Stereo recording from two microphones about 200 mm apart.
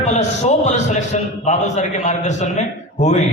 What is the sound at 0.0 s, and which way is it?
A man's voice, 35° left (ahead or behind).